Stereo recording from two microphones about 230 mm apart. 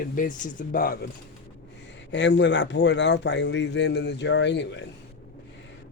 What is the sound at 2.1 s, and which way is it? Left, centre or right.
Speech, left.